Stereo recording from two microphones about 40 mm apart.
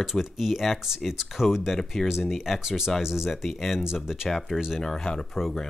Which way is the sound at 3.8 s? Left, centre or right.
Centre.